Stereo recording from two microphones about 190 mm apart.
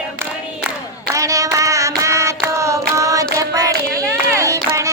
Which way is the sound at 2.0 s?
15° right (ahead or behind).